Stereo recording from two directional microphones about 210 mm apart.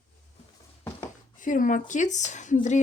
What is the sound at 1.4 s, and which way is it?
Speech, 40° left (ahead or behind).